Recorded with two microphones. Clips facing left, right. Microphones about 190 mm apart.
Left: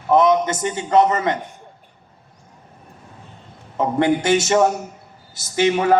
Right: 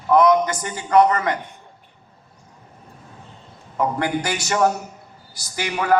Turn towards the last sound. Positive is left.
turn(degrees=25)  # may be behind; listen again after turning